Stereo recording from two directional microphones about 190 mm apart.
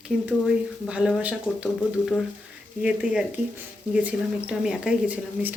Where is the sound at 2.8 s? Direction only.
5° right (ahead or behind).